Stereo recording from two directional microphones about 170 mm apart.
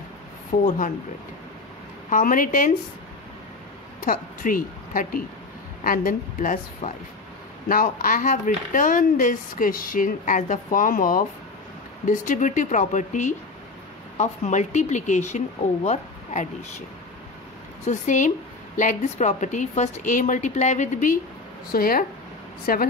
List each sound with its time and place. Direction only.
0.7 s speech: 50° left (ahead or behind)
2.0 s speech: 50° left (ahead or behind)
4.0 s a woman's voice: 55° left (ahead or behind)
17.8 s speech: 50° left (ahead or behind)
21.7 s speech: 60° left (ahead or behind)